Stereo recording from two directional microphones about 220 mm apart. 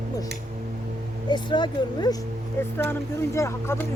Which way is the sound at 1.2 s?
20° left (ahead or behind).